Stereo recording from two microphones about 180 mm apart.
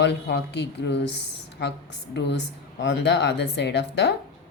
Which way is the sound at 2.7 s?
80° left.